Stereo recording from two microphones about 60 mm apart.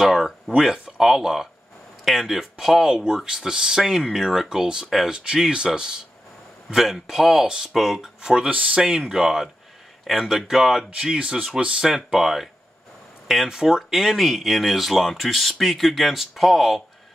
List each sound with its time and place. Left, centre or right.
0.0 s speech: centre
4.8 s speech: centre
5.1 s speech: centre
8.5 s speech: right
9.1 s speech: centre
11.1 s speech: centre
11.8 s speech: centre